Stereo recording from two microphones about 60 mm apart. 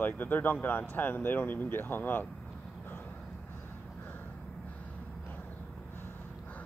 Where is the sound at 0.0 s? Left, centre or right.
Left.